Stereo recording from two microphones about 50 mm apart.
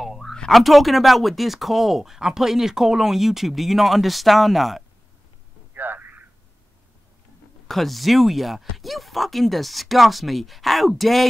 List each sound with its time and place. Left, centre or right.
0.0 s a sound: centre
0.5 s speech: centre
5.8 s telephone: right
7.6 s speech: centre